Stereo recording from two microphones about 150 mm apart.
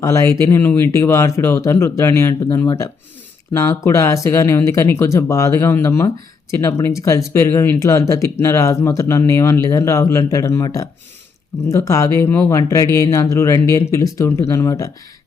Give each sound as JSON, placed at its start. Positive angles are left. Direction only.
{"t": 0.0, "sound": "speech", "side_deg": 20}